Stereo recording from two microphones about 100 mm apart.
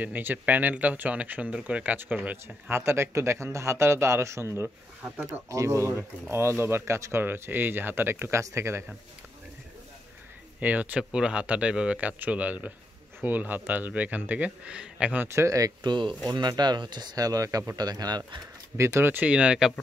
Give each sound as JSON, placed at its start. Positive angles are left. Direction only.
{"t": 0.0, "sound": "speech", "side_deg": -20}
{"t": 10.6, "sound": "speech", "side_deg": -15}
{"t": 15.2, "sound": "speech", "side_deg": -30}
{"t": 15.9, "sound": "speech", "side_deg": -55}
{"t": 18.8, "sound": "speech", "side_deg": -25}